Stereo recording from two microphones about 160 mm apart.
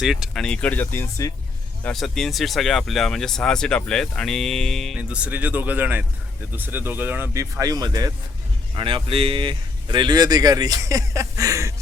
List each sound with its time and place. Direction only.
0.0 s speech: centre (ahead or behind); by 1.3 s 15° left (ahead or behind)
1.8 s speech: 5° left (ahead or behind); by 11.7 s 20° right (ahead or behind)